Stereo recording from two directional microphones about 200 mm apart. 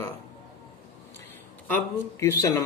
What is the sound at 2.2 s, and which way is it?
Speech, 15° left (ahead or behind).